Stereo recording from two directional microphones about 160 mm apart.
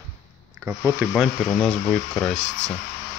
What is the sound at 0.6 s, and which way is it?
Speech, 15° right (ahead or behind).